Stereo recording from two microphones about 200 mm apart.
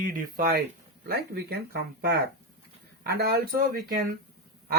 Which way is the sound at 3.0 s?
50° right (ahead or behind).